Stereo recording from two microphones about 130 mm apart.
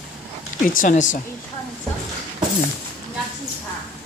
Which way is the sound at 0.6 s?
90° left.